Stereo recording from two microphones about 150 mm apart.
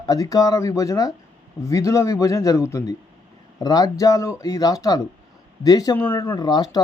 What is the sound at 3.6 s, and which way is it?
Speech, 25° left (ahead or behind).